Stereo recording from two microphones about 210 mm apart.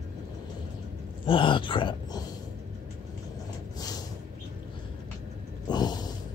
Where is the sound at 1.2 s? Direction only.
25° left (ahead or behind).